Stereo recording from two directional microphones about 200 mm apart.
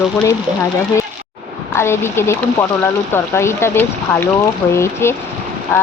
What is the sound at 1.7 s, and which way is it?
Speech, 10° left (ahead or behind).